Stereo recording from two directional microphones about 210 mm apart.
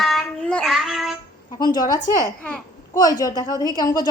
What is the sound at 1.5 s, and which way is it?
Speech, 20° left (ahead or behind).